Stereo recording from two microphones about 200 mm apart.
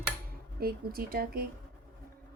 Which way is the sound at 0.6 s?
45° right (ahead or behind).